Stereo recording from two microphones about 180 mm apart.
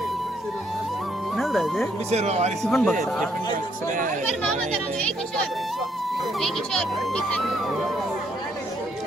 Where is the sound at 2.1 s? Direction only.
35° right (ahead or behind).